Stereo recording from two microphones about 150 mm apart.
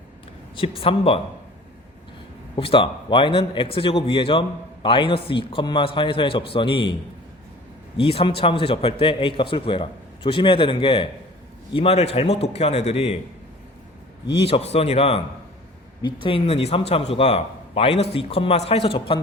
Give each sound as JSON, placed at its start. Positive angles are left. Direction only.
{"t": 0.5, "sound": "a man's voice", "side_deg": 40}
{"t": 2.6, "sound": "a man's voice", "side_deg": 35}
{"t": 7.9, "sound": "a man's voice", "side_deg": 35}
{"t": 14.4, "sound": "a man's voice", "side_deg": 45}
{"t": 16.2, "sound": "a man's voice", "side_deg": 40}